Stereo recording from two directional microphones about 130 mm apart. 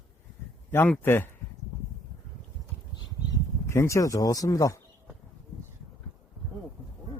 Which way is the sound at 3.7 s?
20° left (ahead or behind).